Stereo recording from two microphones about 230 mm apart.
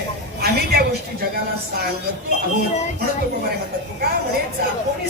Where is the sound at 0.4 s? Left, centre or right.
Right.